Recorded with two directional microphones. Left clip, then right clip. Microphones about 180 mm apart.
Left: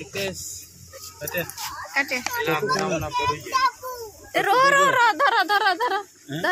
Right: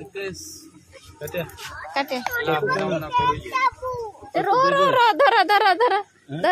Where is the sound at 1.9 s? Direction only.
35° right (ahead or behind).